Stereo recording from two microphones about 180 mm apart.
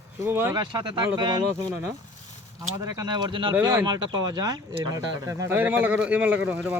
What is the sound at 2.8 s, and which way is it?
Speech, 20° right (ahead or behind).